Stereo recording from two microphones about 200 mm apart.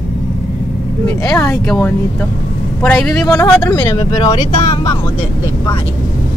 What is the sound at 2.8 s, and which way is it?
Speech, 5° left (ahead or behind).